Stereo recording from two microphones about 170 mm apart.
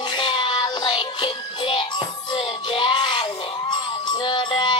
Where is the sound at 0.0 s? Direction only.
25° left (ahead or behind).